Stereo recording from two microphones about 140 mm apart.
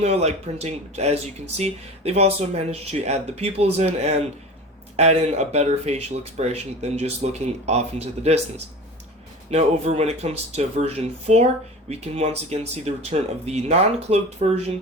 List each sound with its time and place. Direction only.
0.0 s speech: 50° right (ahead or behind)
9.5 s speech: 50° right (ahead or behind)